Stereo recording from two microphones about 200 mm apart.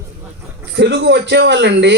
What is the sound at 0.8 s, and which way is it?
Speech, 60° right (ahead or behind).